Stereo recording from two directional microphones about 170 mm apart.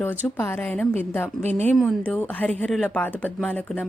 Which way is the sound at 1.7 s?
Centre (ahead or behind).